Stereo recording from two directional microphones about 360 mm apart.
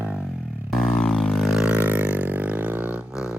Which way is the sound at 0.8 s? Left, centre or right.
Centre.